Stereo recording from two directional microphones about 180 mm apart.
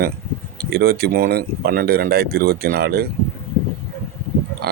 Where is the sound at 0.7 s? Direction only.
60° right (ahead or behind).